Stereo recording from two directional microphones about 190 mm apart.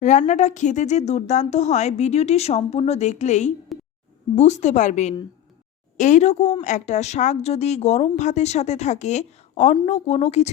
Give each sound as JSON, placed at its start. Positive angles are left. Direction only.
{"t": 0.0, "sound": "a woman's voice", "side_deg": 40}
{"t": 3.7, "sound": "a sound", "side_deg": 0}
{"t": 4.4, "sound": "a woman's voice", "side_deg": 35}